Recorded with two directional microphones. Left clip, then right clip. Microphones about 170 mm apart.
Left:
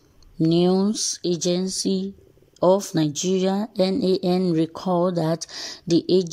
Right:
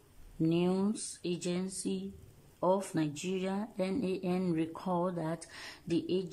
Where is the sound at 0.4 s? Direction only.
30° left (ahead or behind).